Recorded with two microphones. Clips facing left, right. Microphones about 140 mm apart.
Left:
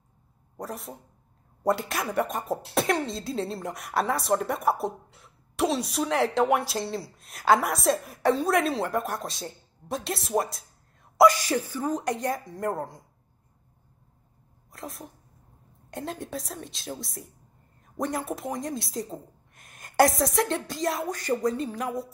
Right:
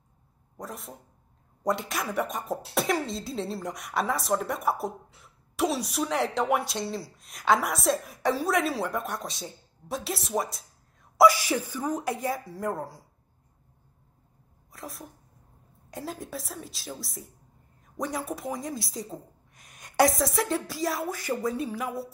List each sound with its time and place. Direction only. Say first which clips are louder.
0.6 s speech: left 3 dB; centre (ahead or behind)
14.7 s speech: left 2 dB; centre (ahead or behind)
21.8 s music: left 2 dB; 20° left (ahead or behind)